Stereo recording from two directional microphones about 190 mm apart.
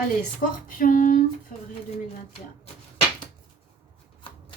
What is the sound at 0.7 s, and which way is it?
Speech, 45° left (ahead or behind).